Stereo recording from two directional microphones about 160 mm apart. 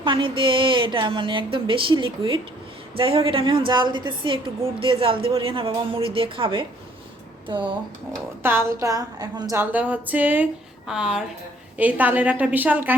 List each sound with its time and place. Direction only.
0.0 s a woman's voice: 30° right (ahead or behind)
8.4 s a woman's voice: 15° right (ahead or behind)
9.6 s speech: 10° right (ahead or behind)